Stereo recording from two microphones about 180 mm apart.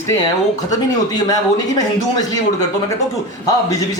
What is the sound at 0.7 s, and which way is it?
Speech, 20° left (ahead or behind).